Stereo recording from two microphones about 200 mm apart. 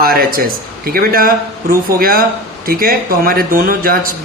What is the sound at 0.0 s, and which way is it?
Speech, 50° right (ahead or behind).